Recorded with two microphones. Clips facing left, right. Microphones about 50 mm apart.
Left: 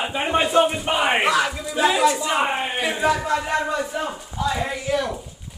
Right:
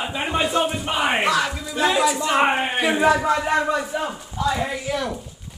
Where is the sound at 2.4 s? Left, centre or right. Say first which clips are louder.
Right 3 dB; right; by 5.1 s centre.